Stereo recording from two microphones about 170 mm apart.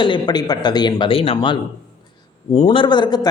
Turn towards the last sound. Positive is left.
turn(degrees=25)  # may be behind; listen again after turning